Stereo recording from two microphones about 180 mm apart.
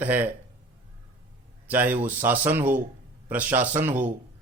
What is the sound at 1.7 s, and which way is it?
Speech, 10° right (ahead or behind).